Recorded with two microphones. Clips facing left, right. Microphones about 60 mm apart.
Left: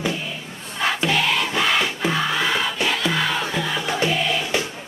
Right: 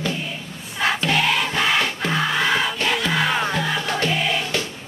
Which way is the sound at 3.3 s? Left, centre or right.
Centre.